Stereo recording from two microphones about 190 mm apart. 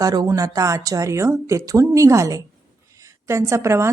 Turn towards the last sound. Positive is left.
turn(degrees=-15)  # may be behind; listen again after turning